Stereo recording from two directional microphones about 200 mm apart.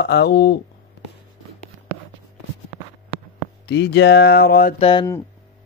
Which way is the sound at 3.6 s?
60° left (ahead or behind).